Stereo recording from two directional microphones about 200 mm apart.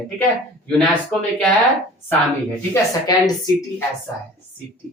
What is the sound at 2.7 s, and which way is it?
A woman's voice, 15° left (ahead or behind).